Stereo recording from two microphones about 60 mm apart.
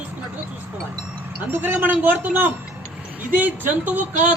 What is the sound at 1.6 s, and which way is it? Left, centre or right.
A woman's voice, right.